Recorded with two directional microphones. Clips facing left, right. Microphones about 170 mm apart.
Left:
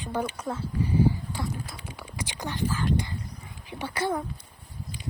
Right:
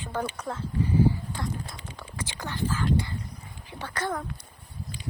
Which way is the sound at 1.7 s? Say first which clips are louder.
Left 1 dB; 10° left (ahead or behind).